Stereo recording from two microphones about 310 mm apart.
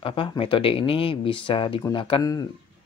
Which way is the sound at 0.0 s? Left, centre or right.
Centre.